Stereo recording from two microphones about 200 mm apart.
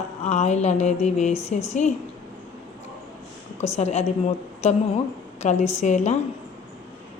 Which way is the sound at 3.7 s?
35° left (ahead or behind).